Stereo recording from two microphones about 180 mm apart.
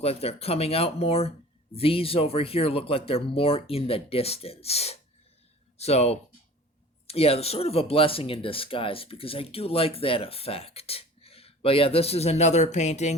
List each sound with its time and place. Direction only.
0.0 s speech: 35° left (ahead or behind)